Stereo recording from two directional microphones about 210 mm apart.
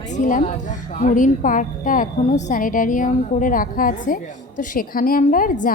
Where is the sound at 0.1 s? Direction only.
35° left (ahead or behind).